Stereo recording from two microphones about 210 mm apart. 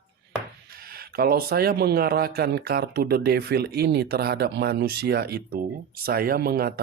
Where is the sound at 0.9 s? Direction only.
45° right (ahead or behind).